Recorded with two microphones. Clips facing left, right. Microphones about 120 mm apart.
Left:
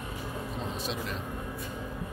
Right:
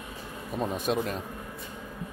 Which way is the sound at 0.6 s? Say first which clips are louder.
Right 10 dB; 50° right (ahead or behind).